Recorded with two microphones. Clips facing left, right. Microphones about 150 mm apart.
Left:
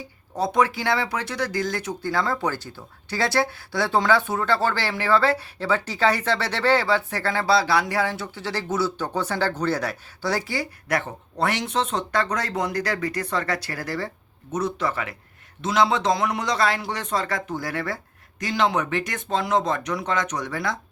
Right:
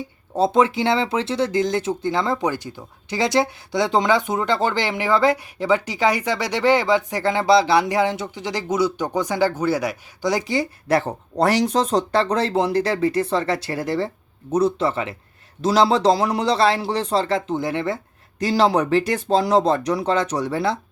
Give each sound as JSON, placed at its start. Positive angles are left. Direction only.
{"t": 0.3, "sound": "speech", "side_deg": -25}